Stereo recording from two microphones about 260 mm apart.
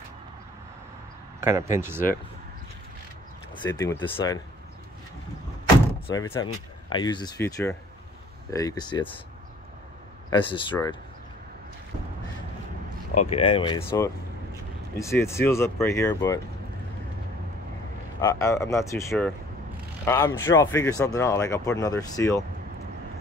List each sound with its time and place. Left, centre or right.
1.4 s speech: centre
3.6 s speech: centre
6.0 s speech: centre
10.3 s speech: centre
13.2 s speech: left
18.2 s speech: centre